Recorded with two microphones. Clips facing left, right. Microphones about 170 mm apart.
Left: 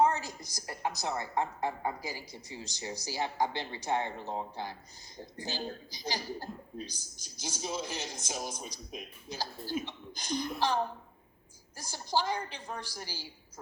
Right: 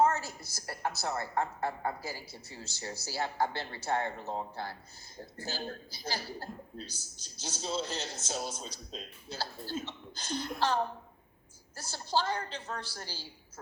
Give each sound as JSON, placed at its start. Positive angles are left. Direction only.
{"t": 0.0, "sound": "a woman's voice", "side_deg": 15}
{"t": 11.8, "sound": "a woman's voice", "side_deg": 15}